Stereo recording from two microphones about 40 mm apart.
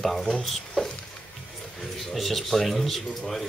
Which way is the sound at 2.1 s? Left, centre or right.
Centre.